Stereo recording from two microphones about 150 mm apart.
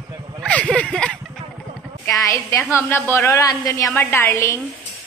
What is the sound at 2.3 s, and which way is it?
A woman's voice, 20° left (ahead or behind).